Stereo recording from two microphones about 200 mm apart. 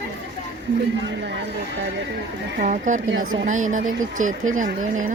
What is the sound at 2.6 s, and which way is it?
Speech, 40° right (ahead or behind).